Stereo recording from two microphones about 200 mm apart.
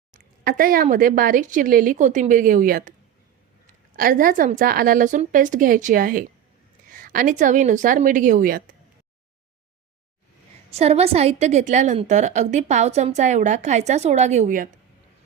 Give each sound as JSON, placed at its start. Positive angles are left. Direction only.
{"t": 0.1, "sound": "speech", "side_deg": -45}
{"t": 3.9, "sound": "a woman's voice", "side_deg": -45}
{"t": 10.7, "sound": "a woman's voice", "side_deg": -30}